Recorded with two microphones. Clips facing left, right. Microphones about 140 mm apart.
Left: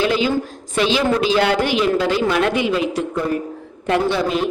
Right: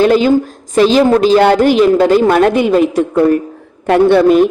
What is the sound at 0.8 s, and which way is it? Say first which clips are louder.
A man's voice: right 9 dB; 40° right (ahead or behind).